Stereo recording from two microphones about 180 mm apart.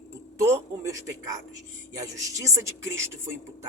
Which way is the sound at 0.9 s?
20° right (ahead or behind).